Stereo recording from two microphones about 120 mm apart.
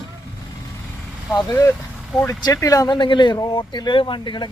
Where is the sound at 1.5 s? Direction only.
30° left (ahead or behind).